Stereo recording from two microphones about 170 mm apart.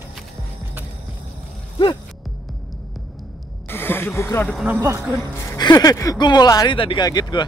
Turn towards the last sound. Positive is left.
turn(degrees=25)  # may be behind; listen again after turning